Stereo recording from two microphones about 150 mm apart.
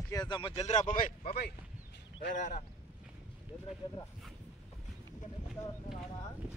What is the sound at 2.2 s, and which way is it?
Speech, 60° left (ahead or behind).